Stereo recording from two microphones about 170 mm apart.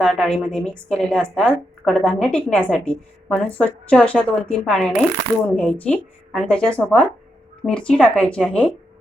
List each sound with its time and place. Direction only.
0.0 s a woman's voice: centre (ahead or behind)